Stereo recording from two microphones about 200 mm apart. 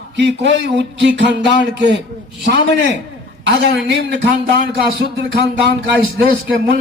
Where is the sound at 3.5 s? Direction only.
60° right (ahead or behind).